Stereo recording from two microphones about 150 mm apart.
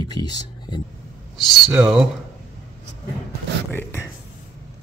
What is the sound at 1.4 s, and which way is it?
Speech, centre (ahead or behind).